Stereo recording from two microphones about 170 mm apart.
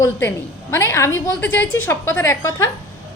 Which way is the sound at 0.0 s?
15° left (ahead or behind).